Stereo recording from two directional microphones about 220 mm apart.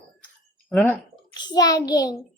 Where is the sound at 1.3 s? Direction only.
20° left (ahead or behind).